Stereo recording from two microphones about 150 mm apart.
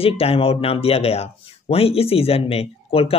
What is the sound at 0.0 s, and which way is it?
Speech, 40° left (ahead or behind).